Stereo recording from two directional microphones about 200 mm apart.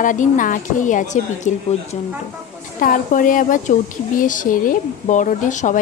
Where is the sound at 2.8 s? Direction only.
45° left (ahead or behind).